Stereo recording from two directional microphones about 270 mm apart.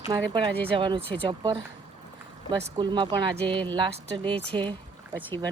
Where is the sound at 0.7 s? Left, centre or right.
Centre.